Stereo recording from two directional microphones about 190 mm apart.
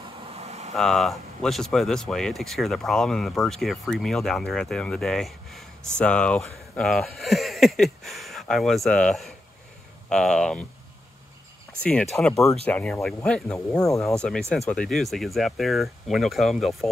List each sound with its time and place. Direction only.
0.3 s vehicle: 35° right (ahead or behind)
0.7 s speech: centre (ahead or behind)
11.8 s speech: 5° left (ahead or behind)
14.0 s speech: 5° left (ahead or behind)